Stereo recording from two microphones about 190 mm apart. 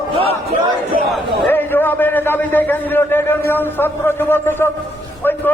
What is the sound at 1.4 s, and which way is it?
A man's voice, 10° left (ahead or behind).